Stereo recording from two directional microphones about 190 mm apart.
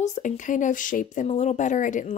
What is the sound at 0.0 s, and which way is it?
Speech, 40° left (ahead or behind).